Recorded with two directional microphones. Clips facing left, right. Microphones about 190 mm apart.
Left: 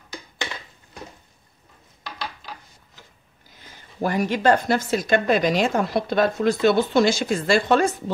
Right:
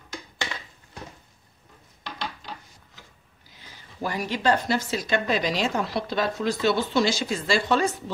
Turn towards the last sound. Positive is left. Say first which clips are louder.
# left 4 dB
turn(degrees=50)  # may be behind; listen again after turning